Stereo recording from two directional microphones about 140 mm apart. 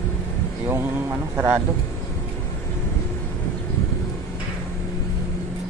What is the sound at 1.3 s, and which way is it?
Speech, 20° right (ahead or behind).